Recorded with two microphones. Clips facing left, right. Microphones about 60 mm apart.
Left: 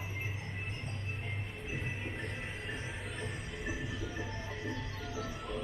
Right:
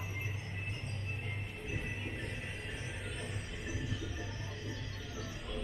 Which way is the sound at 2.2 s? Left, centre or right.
Left.